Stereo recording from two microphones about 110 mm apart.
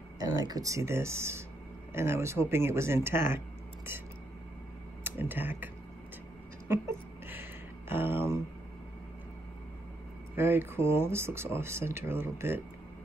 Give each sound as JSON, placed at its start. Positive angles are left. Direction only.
{"t": 0.2, "sound": "speech", "side_deg": -35}
{"t": 5.0, "sound": "speech", "side_deg": -20}
{"t": 6.7, "sound": "a sound", "side_deg": -20}
{"t": 7.9, "sound": "speech", "side_deg": -20}
{"t": 10.3, "sound": "speech", "side_deg": -20}